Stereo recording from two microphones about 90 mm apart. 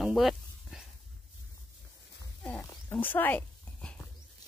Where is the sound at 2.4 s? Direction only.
15° left (ahead or behind).